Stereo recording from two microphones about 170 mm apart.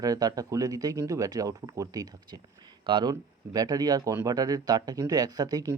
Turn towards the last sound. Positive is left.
turn(degrees=-20)  # may be behind; listen again after turning